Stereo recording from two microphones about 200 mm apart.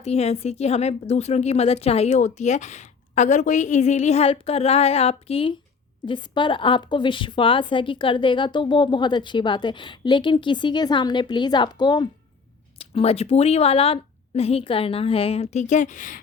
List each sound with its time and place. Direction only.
0.0 s a woman's voice: 30° left (ahead or behind)